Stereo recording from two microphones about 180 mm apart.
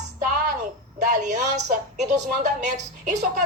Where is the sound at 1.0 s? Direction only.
40° right (ahead or behind).